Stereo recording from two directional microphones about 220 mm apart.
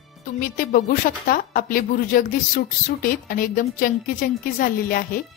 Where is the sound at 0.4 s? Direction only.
40° left (ahead or behind).